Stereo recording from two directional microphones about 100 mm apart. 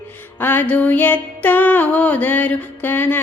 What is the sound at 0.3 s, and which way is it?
Music, 20° left (ahead or behind).